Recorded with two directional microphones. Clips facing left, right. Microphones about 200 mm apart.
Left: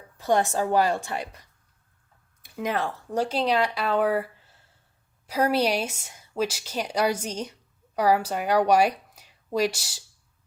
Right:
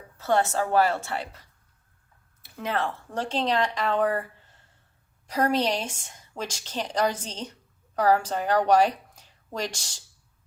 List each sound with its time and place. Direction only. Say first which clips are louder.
0.2 s a woman's voice: left 1 dB; 15° left (ahead or behind)
2.4 s a woman's voice: left 1 dB; 10° left (ahead or behind)